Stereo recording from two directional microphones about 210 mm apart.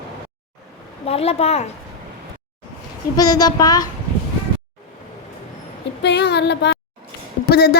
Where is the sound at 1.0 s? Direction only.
30° left (ahead or behind).